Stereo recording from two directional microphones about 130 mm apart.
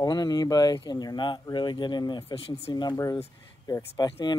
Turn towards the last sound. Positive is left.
turn(degrees=35)  # may be behind; listen again after turning